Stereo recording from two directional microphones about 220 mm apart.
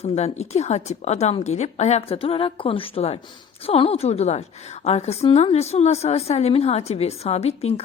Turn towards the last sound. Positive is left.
turn(degrees=30)  # may be behind; listen again after turning